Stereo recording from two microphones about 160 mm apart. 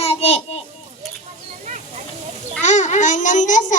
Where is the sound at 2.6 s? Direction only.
45° left (ahead or behind).